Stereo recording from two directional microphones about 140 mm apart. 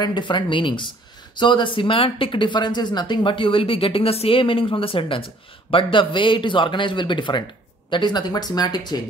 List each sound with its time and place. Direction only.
0.0 s speech: 35° left (ahead or behind)